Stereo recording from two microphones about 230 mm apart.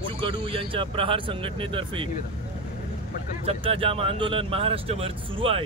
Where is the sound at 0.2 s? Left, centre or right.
Right.